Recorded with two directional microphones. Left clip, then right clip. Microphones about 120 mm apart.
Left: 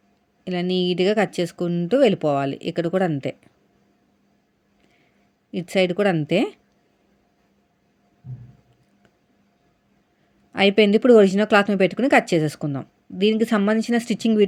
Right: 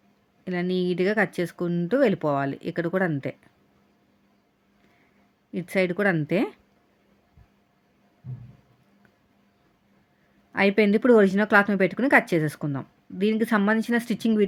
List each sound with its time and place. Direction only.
0.4 s speech: 20° left (ahead or behind)
5.5 s speech: 20° left (ahead or behind)
10.5 s speech: 20° left (ahead or behind)